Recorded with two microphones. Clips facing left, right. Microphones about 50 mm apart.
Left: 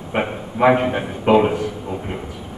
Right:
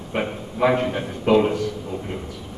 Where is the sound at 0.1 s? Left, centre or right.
Left.